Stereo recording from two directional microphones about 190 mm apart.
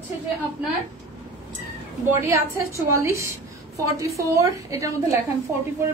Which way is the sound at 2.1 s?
10° right (ahead or behind).